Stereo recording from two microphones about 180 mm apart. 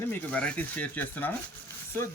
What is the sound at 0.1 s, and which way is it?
Speech, 10° left (ahead or behind).